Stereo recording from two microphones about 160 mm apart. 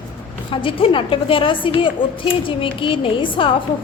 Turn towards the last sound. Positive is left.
turn(degrees=30)  # may be behind; listen again after turning